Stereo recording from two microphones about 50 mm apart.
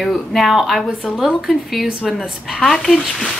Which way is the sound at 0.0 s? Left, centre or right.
Centre.